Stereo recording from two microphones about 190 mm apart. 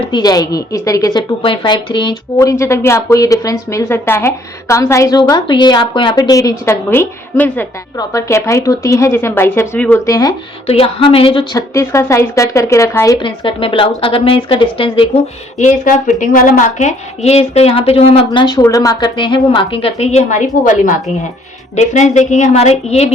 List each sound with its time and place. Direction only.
0.1 s a woman's voice: 20° left (ahead or behind)
10.1 s a woman's voice: 20° left (ahead or behind)
10.7 s a woman's voice: 30° left (ahead or behind)
11.5 s a woman's voice: 15° left (ahead or behind)
13.1 s a woman's voice: 25° left (ahead or behind)